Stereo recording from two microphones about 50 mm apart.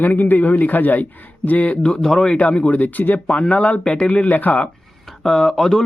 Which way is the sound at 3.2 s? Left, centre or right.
Left.